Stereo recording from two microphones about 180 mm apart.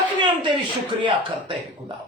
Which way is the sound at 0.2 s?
25° right (ahead or behind).